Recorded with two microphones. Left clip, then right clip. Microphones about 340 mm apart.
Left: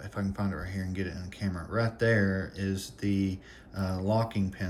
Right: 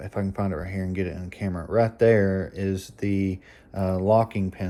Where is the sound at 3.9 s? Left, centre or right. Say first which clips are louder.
Right 10 dB; centre.